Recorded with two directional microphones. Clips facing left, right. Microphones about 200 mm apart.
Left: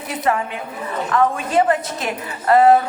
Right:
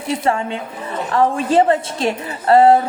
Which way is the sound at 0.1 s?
30° right (ahead or behind).